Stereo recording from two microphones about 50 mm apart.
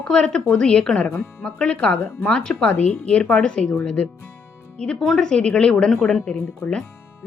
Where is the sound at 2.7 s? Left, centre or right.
Left.